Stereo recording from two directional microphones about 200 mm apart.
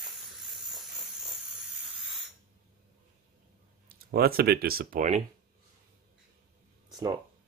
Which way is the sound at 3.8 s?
50° right (ahead or behind).